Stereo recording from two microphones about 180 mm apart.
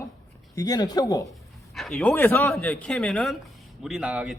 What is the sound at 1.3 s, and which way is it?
A man's voice, centre (ahead or behind).